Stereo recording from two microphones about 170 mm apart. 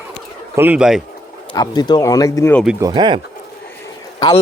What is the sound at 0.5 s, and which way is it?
Speech, 10° right (ahead or behind).